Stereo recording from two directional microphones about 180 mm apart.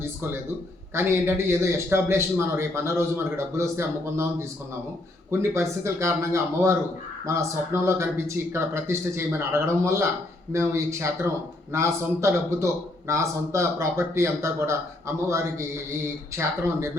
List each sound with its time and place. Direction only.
0.0 s a man's voice: 10° right (ahead or behind)